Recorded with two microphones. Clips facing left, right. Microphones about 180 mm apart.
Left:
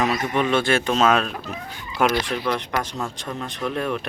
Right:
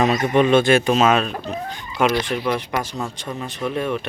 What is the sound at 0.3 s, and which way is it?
Speech, 20° right (ahead or behind).